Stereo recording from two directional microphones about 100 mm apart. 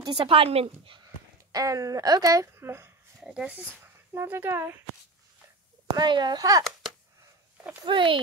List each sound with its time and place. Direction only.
0.1 s a woman's voice: 60° right (ahead or behind)
1.5 s speech: 35° right (ahead or behind)
3.2 s speech: 10° right (ahead or behind)
3.8 s speech: 25° right (ahead or behind)
5.9 s speech: 50° right (ahead or behind)
7.8 s a woman's voice: 55° right (ahead or behind)